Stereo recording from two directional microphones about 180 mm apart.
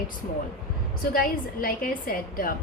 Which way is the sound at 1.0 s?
50° left (ahead or behind).